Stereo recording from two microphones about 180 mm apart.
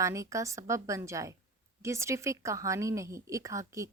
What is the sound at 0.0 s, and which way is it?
A woman's voice, 15° right (ahead or behind).